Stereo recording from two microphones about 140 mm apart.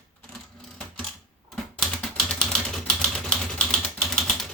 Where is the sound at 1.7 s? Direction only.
Centre (ahead or behind).